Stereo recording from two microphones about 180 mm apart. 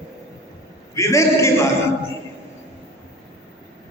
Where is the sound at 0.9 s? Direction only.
15° left (ahead or behind).